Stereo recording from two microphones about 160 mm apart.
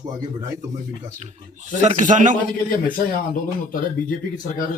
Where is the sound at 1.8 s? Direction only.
50° right (ahead or behind).